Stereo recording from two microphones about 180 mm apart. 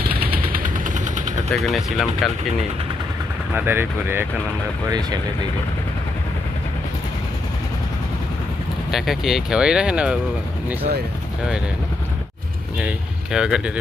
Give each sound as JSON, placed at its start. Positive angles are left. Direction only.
{"t": 0.5, "sound": "vehicle", "side_deg": -45}
{"t": 1.5, "sound": "speech", "side_deg": 0}
{"t": 3.5, "sound": "speech", "side_deg": -10}
{"t": 4.9, "sound": "speech", "side_deg": -20}
{"t": 8.9, "sound": "speech", "side_deg": 0}
{"t": 13.3, "sound": "speech", "side_deg": -5}